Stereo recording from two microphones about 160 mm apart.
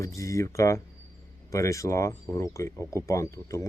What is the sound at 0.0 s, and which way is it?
Speech, 20° left (ahead or behind).